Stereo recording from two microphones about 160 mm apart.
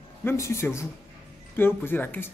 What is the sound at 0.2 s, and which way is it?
Speech, 15° left (ahead or behind).